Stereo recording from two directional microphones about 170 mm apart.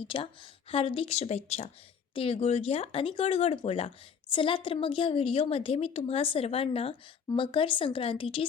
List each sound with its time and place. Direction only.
0.1 s speech: 30° left (ahead or behind)